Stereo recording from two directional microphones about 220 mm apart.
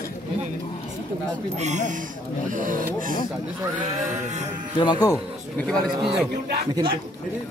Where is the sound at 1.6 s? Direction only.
35° right (ahead or behind).